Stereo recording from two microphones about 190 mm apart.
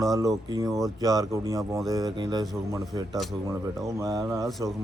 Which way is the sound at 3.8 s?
15° right (ahead or behind).